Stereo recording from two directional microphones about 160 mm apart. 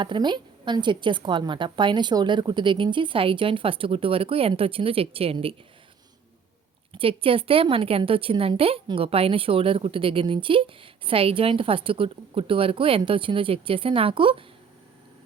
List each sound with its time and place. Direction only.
0.0 s a woman's voice: 30° right (ahead or behind)
6.9 s a woman's voice: 35° right (ahead or behind)